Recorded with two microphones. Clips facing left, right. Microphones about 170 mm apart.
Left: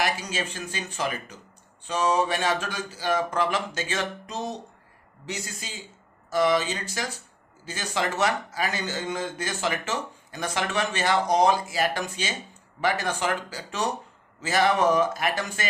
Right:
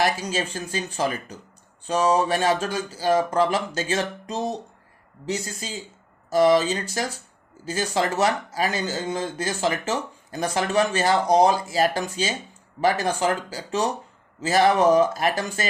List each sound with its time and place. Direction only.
0.0 s speech: 35° right (ahead or behind)